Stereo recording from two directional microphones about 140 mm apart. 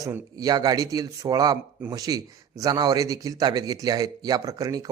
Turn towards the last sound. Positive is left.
turn(degrees=-25)  # may be behind; listen again after turning